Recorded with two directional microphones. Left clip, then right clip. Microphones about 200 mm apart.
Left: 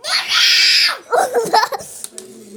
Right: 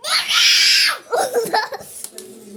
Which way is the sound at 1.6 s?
40° left (ahead or behind).